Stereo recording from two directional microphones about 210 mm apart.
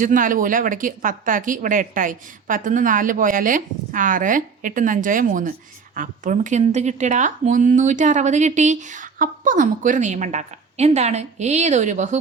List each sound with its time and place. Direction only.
0.0 s speech: 40° right (ahead or behind)